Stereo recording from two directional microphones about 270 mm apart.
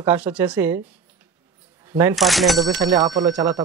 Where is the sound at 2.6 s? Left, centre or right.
Centre.